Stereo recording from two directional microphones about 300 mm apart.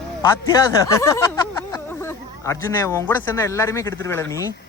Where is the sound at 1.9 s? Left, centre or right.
Centre.